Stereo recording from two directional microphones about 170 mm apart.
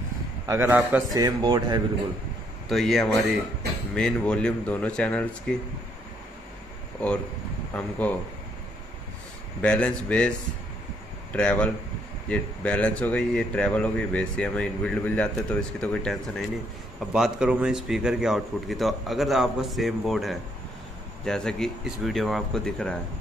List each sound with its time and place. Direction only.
0.5 s a man's voice: 10° right (ahead or behind)
1.1 s speech: 25° right (ahead or behind)
2.7 s a man's voice: centre (ahead or behind)
7.7 s speech: 10° left (ahead or behind)
9.6 s speech: 5° left (ahead or behind)
11.3 s a man's voice: 5° left (ahead or behind)